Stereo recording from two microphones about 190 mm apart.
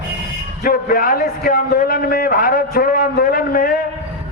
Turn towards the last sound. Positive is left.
turn(degrees=50)  # may be behind; listen again after turning